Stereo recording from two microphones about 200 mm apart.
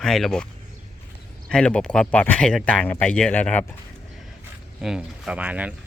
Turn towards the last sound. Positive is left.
turn(degrees=-5)  # may be behind; listen again after turning